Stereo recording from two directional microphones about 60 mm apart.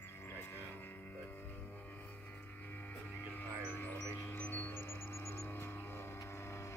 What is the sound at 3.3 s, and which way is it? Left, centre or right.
Music, left.